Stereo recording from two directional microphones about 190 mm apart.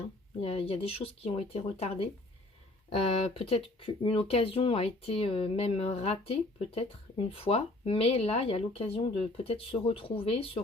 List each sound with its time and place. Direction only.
0.4 s speech: 30° left (ahead or behind)